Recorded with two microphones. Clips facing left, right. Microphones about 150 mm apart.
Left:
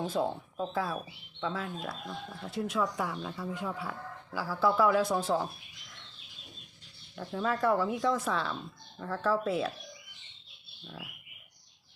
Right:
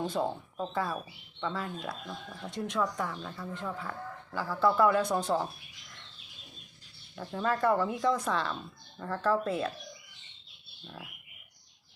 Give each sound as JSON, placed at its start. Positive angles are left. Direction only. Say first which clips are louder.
{"t": 0.0, "sound": "speech", "louder": "even", "side_deg": 0}
{"t": 7.2, "sound": "speech", "louder": "right 1 dB", "side_deg": 0}
{"t": 10.8, "sound": "speech", "louder": "even", "side_deg": 0}